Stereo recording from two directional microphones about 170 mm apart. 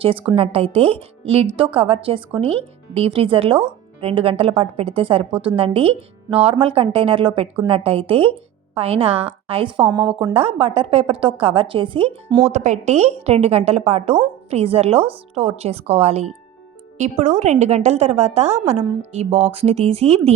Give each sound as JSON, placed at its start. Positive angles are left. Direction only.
{"t": 0.0, "sound": "a woman's voice", "side_deg": -30}
{"t": 12.5, "sound": "a woman's voice", "side_deg": -40}